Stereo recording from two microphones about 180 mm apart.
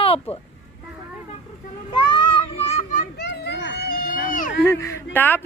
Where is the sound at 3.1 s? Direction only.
70° left (ahead or behind); by 4.5 s 50° left (ahead or behind).